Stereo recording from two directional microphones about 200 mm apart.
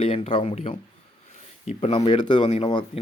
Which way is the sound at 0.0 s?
25° left (ahead or behind).